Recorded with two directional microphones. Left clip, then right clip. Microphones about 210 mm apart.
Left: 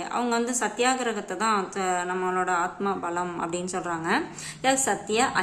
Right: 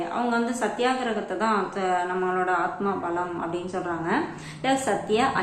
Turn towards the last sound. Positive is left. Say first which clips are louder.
# right 1 dB
turn(degrees=20)  # may be behind; listen again after turning